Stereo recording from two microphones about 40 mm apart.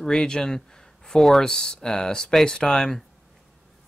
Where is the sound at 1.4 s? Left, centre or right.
Centre.